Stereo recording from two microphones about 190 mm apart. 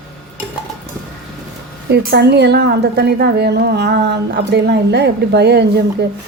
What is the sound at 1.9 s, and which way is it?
A woman's voice, 60° right (ahead or behind).